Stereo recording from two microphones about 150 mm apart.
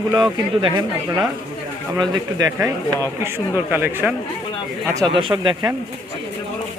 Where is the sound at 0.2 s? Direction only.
30° right (ahead or behind).